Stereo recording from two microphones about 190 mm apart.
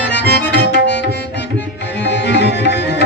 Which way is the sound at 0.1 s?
65° left (ahead or behind).